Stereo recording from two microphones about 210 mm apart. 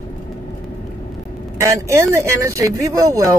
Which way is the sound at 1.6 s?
15° right (ahead or behind).